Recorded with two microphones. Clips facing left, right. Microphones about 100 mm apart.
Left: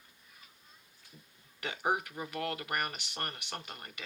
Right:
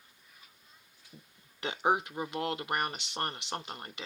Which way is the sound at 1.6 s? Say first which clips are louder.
Right 4 dB; 25° right (ahead or behind).